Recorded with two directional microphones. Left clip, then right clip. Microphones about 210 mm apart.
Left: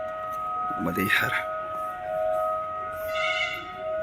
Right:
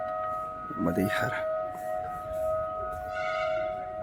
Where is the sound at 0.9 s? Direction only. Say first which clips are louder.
Left 6 dB; 15° right (ahead or behind).